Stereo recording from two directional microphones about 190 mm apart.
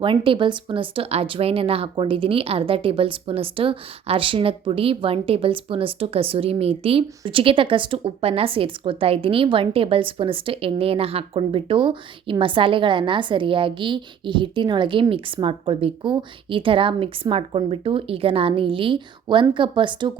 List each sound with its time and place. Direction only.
0.0 s speech: 25° right (ahead or behind)